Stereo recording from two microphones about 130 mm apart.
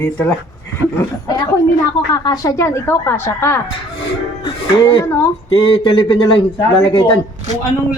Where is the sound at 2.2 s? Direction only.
30° left (ahead or behind).